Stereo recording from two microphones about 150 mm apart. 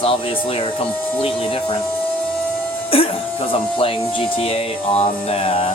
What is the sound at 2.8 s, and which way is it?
Speech, 40° left (ahead or behind).